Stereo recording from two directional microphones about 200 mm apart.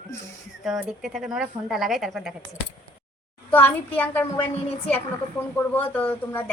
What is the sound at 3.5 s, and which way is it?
Speech, 10° left (ahead or behind).